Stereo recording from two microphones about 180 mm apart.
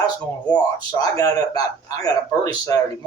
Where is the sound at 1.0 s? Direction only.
20° left (ahead or behind).